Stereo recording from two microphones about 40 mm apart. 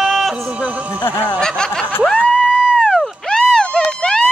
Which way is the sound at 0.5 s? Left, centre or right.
Right.